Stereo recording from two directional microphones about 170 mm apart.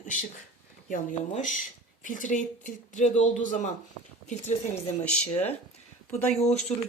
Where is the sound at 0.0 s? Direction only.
45° left (ahead or behind).